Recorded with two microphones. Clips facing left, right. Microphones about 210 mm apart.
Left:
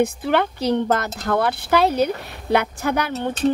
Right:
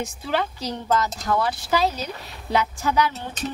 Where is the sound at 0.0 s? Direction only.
60° left (ahead or behind).